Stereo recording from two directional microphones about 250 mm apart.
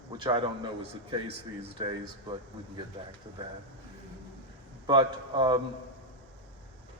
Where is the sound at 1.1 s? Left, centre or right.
Right.